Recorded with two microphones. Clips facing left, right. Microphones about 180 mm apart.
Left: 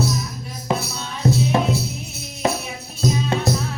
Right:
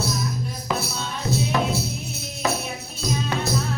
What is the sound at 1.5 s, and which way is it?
Music, 25° left (ahead or behind).